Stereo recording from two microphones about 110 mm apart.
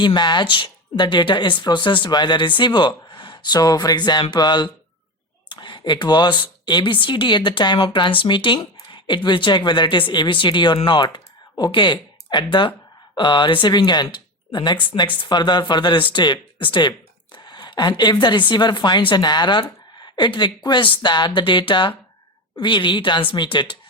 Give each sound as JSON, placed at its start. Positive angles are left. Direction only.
{"t": 0.0, "sound": "speech", "side_deg": 45}